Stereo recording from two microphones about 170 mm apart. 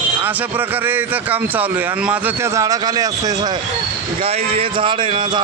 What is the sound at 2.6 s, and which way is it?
Speech, 20° right (ahead or behind).